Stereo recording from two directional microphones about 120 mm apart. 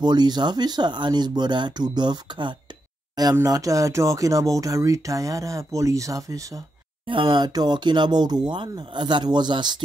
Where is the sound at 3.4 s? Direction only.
30° right (ahead or behind).